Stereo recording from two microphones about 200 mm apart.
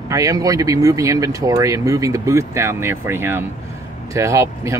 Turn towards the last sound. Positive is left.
turn(degrees=-15)  # may be behind; listen again after turning